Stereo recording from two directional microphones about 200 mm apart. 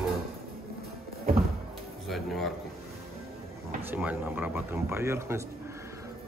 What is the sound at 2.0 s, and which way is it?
Speech, centre (ahead or behind).